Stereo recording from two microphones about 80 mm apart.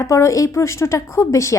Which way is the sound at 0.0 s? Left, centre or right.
Left.